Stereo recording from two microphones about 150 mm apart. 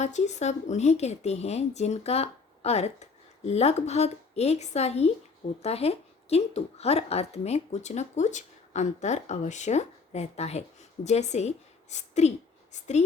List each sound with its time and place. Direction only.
0.0 s a woman's voice: 50° left (ahead or behind)